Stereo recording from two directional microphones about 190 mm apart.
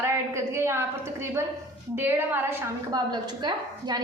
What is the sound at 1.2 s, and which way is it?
A woman's voice, 15° right (ahead or behind).